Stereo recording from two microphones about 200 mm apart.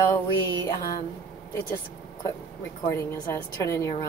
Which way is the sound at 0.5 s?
20° left (ahead or behind).